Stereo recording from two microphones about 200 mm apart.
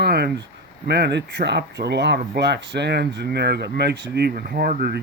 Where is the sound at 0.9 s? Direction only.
55° right (ahead or behind).